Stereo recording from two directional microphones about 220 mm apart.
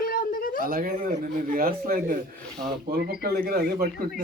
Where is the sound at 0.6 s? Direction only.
40° right (ahead or behind).